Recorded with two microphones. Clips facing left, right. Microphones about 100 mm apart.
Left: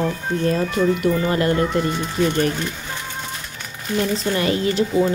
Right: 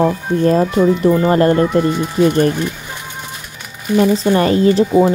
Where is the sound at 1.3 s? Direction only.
35° right (ahead or behind).